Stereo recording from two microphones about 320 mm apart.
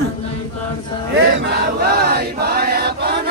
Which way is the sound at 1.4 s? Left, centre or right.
Right.